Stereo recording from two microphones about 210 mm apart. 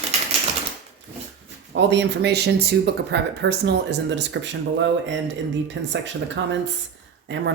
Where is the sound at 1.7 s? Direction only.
55° right (ahead or behind).